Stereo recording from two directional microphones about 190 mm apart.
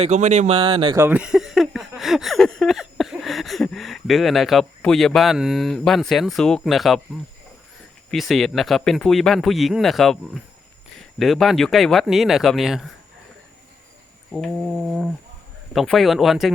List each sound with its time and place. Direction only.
0.0 s speech: 35° right (ahead or behind)
0.9 s speech: 10° right (ahead or behind)
8.1 s speech: centre (ahead or behind)
14.3 s speech: centre (ahead or behind)